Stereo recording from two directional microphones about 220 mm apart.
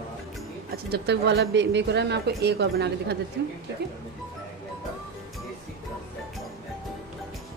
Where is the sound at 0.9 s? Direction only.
50° right (ahead or behind).